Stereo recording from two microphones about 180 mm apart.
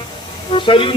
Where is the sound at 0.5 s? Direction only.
30° left (ahead or behind).